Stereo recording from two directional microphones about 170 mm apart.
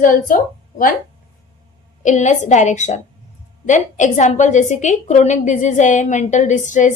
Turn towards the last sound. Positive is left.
turn(degrees=45)  # may be behind; listen again after turning